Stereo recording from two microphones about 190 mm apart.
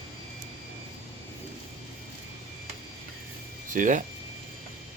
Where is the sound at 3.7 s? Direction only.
45° right (ahead or behind).